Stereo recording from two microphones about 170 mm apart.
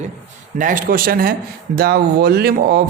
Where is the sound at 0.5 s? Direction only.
50° right (ahead or behind).